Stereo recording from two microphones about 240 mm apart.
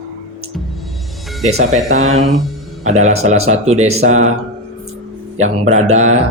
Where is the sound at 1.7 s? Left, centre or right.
Right.